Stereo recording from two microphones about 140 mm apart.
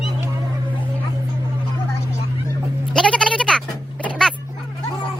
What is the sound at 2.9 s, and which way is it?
Bleat, 5° left (ahead or behind).